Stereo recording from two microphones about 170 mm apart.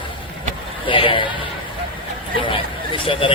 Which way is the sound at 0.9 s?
30° left (ahead or behind).